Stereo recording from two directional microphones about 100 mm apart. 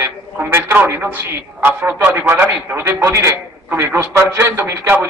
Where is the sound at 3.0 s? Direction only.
30° right (ahead or behind).